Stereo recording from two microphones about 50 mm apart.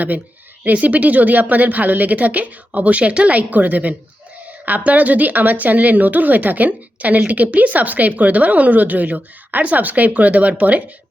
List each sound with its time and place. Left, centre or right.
0.6 s a woman's voice: right